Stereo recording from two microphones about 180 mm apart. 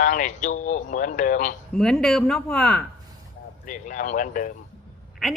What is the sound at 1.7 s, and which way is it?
Speech, centre (ahead or behind).